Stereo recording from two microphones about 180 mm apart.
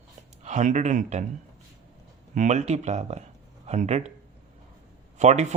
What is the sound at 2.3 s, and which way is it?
A man's voice, 40° right (ahead or behind).